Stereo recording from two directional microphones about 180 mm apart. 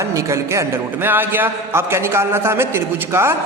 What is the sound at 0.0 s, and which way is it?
A man's voice, 15° right (ahead or behind).